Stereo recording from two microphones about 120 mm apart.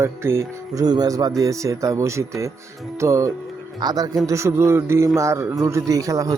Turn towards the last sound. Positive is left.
turn(degrees=-30)  # may be behind; listen again after turning